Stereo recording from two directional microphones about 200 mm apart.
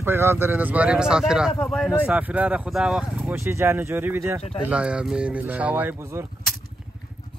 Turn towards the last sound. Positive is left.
turn(degrees=-10)  # may be behind; listen again after turning